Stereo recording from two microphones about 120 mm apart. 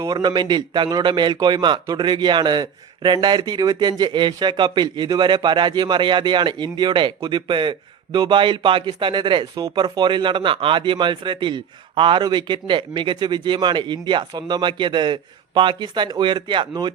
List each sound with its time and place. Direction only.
0.0 s a man's voice: 35° right (ahead or behind)